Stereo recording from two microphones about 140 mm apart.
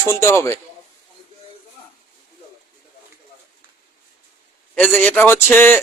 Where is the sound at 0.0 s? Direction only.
15° left (ahead or behind).